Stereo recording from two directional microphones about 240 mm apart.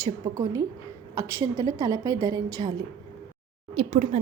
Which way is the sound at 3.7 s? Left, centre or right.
Right.